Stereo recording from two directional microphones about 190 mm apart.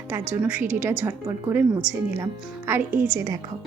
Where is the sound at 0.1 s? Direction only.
10° right (ahead or behind).